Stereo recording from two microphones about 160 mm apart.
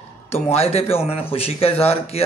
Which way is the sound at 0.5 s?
40° left (ahead or behind).